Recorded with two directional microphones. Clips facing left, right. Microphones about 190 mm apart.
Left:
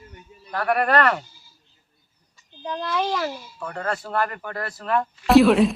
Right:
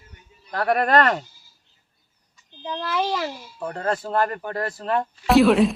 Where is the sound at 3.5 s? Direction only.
30° right (ahead or behind).